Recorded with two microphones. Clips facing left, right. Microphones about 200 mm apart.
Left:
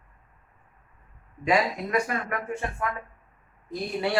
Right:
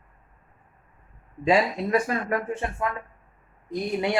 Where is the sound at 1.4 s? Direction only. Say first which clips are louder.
Right 3 dB; 30° right (ahead or behind).